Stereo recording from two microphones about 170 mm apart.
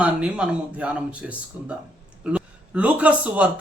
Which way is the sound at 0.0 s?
5° right (ahead or behind).